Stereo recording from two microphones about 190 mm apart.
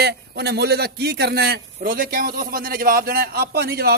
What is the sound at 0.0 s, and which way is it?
A man's voice, 60° right (ahead or behind).